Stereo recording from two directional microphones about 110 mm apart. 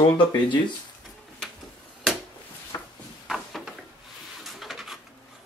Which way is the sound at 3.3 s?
Centre (ahead or behind).